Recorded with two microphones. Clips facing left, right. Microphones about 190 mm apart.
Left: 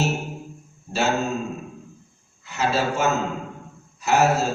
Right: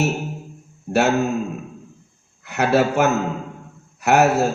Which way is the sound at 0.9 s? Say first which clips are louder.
Right 9 dB; 60° right (ahead or behind).